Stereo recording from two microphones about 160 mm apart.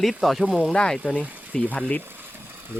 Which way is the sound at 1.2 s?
10° right (ahead or behind).